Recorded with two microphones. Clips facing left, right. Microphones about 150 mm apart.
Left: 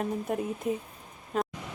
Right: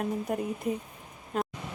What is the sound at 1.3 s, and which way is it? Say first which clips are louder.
Vehicle: left 1 dB; centre (ahead or behind).